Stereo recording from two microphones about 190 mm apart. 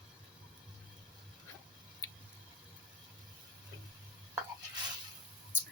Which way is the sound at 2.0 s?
20° left (ahead or behind).